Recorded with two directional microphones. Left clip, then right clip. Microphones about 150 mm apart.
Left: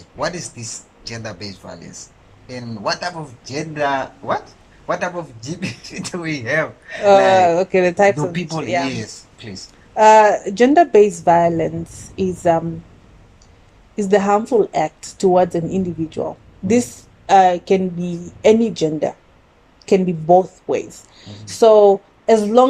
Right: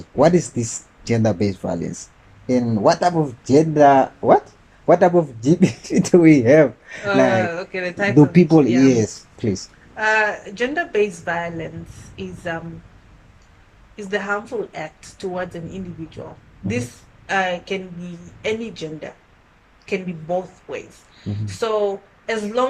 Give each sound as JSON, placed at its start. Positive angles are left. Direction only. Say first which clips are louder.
{"t": 0.2, "sound": "speech", "louder": "right 9 dB", "side_deg": -50}
{"t": 7.4, "sound": "speech", "louder": "left 10 dB", "side_deg": 40}
{"t": 8.1, "sound": "speech", "louder": "right 10 dB", "side_deg": -35}
{"t": 9.9, "sound": "speech", "louder": "left 9 dB", "side_deg": 40}
{"t": 13.9, "sound": "speech", "louder": "left 8 dB", "side_deg": 40}